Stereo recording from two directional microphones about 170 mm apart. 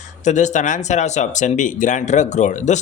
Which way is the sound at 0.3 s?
45° left (ahead or behind).